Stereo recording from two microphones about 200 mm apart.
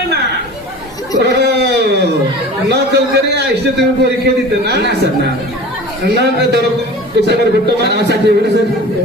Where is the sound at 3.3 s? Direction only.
55° right (ahead or behind).